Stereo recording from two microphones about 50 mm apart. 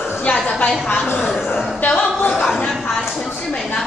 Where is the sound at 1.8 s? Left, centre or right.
Left.